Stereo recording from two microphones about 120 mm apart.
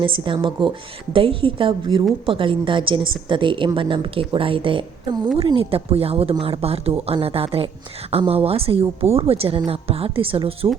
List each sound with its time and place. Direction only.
0.3 s a woman's voice: 45° right (ahead or behind)